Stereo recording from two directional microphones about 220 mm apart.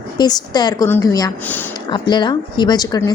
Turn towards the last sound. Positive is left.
turn(degrees=15)  # may be behind; listen again after turning